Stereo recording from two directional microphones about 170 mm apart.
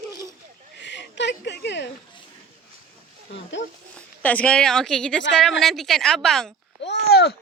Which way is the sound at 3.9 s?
10° left (ahead or behind).